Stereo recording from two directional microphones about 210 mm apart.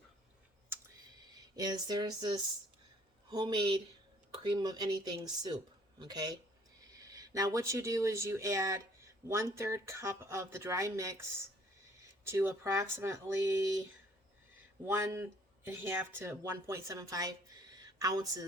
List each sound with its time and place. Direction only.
1.5 s speech: 20° right (ahead or behind)
14.8 s speech: 10° right (ahead or behind)